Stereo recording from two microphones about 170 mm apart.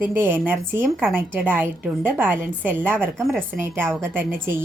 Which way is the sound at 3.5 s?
15° right (ahead or behind).